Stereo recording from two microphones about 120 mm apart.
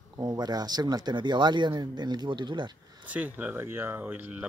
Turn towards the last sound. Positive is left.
turn(degrees=-10)  # may be behind; listen again after turning